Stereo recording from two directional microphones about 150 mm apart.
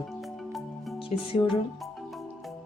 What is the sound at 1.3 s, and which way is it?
Speech, 35° left (ahead or behind).